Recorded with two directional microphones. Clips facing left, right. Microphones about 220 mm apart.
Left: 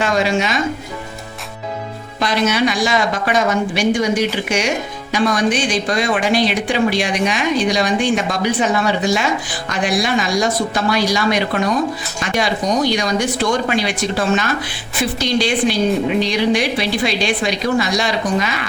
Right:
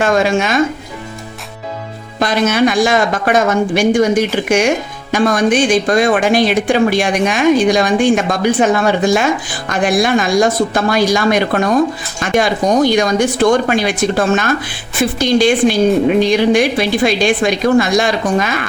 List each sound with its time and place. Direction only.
0.0 s speech: 50° right (ahead or behind)
2.1 s speech: 50° right (ahead or behind)